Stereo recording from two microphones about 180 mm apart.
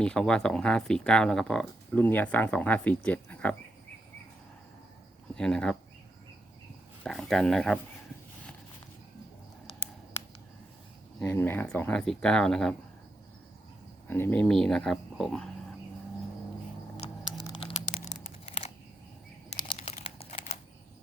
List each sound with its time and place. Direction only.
0.0 s speech: 5° left (ahead or behind)
5.3 s speech: 5° left (ahead or behind)
7.0 s speech: centre (ahead or behind)
11.2 s speech: 15° left (ahead or behind)
14.1 s speech: 10° left (ahead or behind)
17.4 s tearing: 30° left (ahead or behind)
19.5 s crumpling: 25° left (ahead or behind)